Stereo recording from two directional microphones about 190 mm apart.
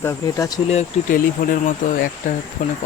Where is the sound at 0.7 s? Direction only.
40° left (ahead or behind).